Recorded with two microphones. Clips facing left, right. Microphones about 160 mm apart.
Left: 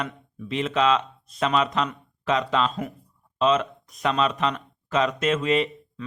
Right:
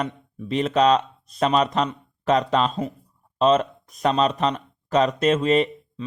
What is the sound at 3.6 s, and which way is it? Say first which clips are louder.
Speech: left 1 dB; centre (ahead or behind).